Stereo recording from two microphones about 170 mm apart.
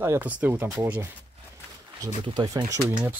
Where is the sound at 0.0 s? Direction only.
10° right (ahead or behind).